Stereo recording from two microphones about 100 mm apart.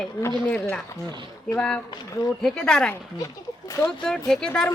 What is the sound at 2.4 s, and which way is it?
Speech, 5° left (ahead or behind).